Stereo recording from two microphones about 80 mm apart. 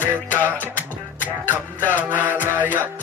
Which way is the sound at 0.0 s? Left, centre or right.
Left.